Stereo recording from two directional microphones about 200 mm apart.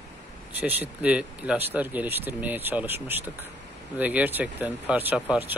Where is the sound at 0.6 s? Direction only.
10° right (ahead or behind).